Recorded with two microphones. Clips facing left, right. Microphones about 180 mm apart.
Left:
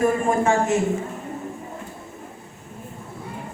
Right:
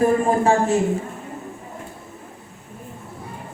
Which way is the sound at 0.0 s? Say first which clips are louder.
Right 2 dB; 35° right (ahead or behind).